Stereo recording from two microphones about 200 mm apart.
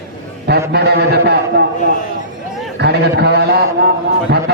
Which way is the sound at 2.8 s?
55° right (ahead or behind).